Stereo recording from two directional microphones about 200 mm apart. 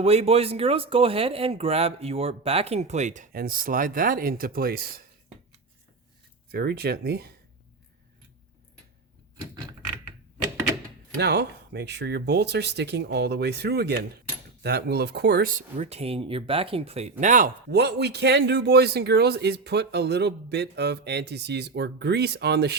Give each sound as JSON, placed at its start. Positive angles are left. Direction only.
{"t": 0.0, "sound": "speech", "side_deg": -30}
{"t": 6.5, "sound": "speech", "side_deg": -50}
{"t": 11.2, "sound": "speech", "side_deg": -55}